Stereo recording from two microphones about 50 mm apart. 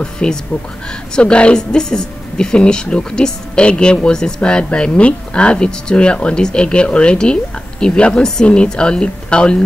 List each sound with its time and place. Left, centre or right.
0.0 s a woman's voice: centre